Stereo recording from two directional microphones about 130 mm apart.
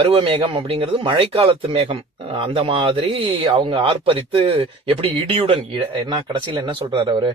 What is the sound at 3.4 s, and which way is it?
Speech, 35° right (ahead or behind).